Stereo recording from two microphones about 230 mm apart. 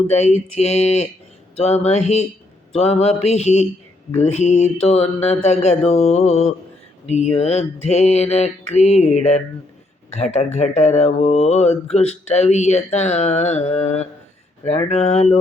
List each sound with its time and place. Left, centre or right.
0.1 s speech: left